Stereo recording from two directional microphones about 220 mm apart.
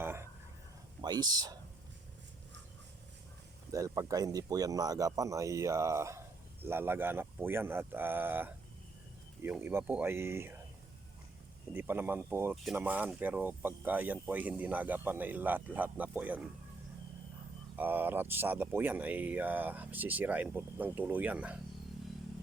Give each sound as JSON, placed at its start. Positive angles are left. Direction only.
{"t": 0.0, "sound": "a sound", "side_deg": -10}
{"t": 1.0, "sound": "speech", "side_deg": -20}
{"t": 3.7, "sound": "speech", "side_deg": -15}
{"t": 11.7, "sound": "speech", "side_deg": -10}
{"t": 17.7, "sound": "speech", "side_deg": -10}